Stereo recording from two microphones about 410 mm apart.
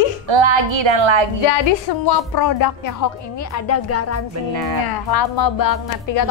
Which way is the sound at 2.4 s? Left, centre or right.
Left.